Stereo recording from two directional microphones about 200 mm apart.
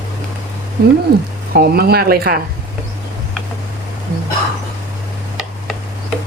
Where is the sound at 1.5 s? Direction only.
50° right (ahead or behind).